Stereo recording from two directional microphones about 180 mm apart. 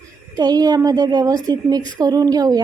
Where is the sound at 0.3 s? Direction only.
20° right (ahead or behind).